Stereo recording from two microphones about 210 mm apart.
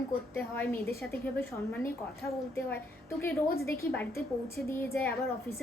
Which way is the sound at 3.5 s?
50° left (ahead or behind).